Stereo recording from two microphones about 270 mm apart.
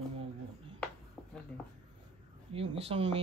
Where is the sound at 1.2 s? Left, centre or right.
Centre.